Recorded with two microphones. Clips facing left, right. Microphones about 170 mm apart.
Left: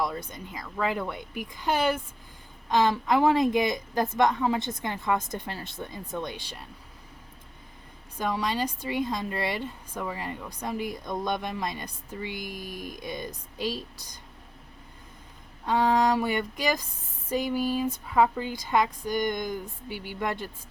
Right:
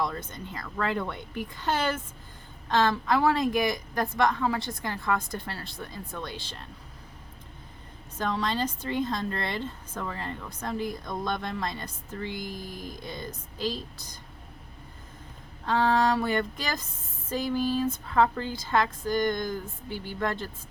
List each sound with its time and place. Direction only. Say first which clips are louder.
0.0 s a woman's voice: left 1 dB; 10° left (ahead or behind)
8.2 s a woman's voice: even; 10° left (ahead or behind)
15.6 s a woman's voice: left 1 dB; 15° left (ahead or behind)